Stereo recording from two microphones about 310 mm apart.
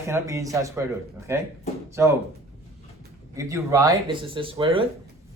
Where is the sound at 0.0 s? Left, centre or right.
Centre.